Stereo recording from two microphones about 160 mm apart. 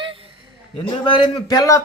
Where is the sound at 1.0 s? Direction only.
30° left (ahead or behind).